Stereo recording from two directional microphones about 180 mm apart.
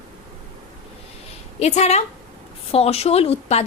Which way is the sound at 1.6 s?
35° left (ahead or behind).